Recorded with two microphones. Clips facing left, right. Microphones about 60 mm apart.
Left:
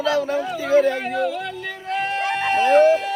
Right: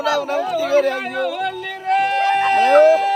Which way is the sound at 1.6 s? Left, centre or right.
Right.